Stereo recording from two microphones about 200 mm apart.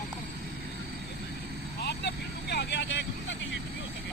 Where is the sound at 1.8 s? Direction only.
55° left (ahead or behind).